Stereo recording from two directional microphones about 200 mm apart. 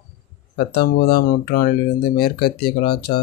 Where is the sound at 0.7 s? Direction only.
50° left (ahead or behind).